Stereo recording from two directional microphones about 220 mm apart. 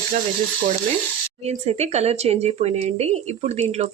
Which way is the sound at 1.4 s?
30° right (ahead or behind).